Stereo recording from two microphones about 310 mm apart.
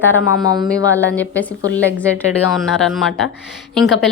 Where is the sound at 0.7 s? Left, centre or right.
Centre.